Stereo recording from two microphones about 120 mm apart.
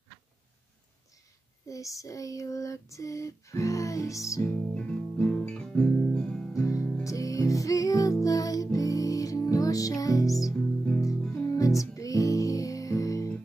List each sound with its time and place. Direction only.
1.7 s a sound: 25° left (ahead or behind)
4.4 s music: 15° left (ahead or behind)
5.5 s guitar: 5° left (ahead or behind)
6.5 s music: 25° left (ahead or behind)